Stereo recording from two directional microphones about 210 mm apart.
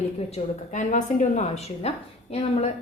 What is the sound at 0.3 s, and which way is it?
A woman's voice, 35° left (ahead or behind).